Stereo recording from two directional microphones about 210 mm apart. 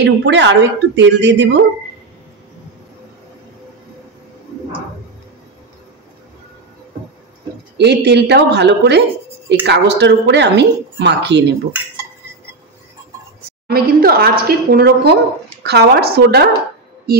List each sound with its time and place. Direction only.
0.0 s speech: 55° right (ahead or behind)
7.7 s a woman's voice: 55° right (ahead or behind)
13.7 s a woman's voice: 45° right (ahead or behind)